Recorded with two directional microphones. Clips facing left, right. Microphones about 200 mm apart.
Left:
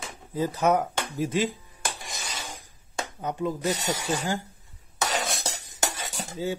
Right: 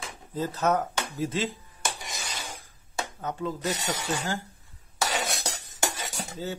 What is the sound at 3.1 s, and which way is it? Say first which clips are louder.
Speech: left 4 dB; 15° left (ahead or behind).